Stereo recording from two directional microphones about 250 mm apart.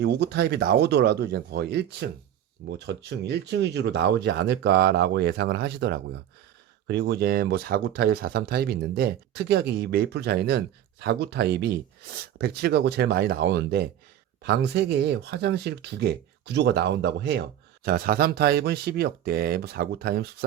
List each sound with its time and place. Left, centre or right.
0.0 s speech: right